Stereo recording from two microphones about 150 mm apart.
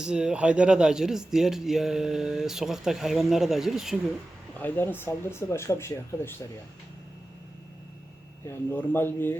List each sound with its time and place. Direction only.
0.0 s speech: 5° right (ahead or behind)
4.5 s speech: 10° left (ahead or behind)
8.4 s speech: 15° left (ahead or behind)